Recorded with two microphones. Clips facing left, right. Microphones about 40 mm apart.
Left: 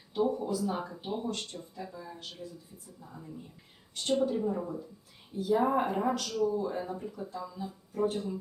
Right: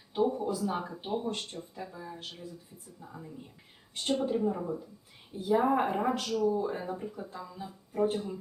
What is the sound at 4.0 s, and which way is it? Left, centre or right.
Speech, right.